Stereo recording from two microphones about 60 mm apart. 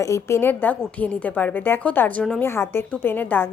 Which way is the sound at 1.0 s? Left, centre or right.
Left.